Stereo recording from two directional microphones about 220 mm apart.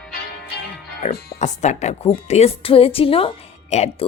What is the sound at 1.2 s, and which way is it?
A woman's voice, 35° left (ahead or behind).